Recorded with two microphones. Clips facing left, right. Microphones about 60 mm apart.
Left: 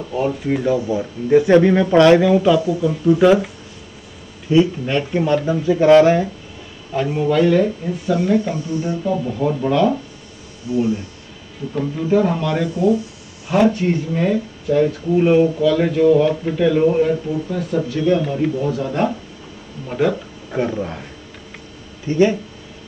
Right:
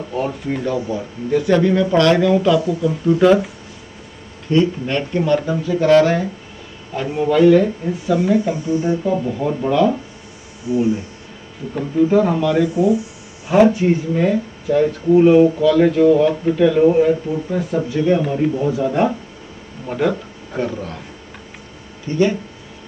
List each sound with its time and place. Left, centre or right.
0.1 s speech: centre
4.5 s speech: centre
7.0 s speech: centre
9.6 s speech: centre
10.7 s a man's voice: centre
11.7 s speech: centre
17.5 s a man's voice: centre
20.0 s speech: centre
20.5 s speech: centre
22.0 s speech: left